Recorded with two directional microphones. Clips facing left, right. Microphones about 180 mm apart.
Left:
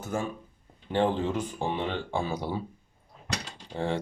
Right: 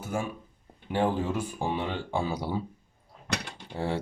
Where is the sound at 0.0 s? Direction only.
10° right (ahead or behind).